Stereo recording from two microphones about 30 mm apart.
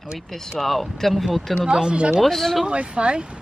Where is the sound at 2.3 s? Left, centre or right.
Centre.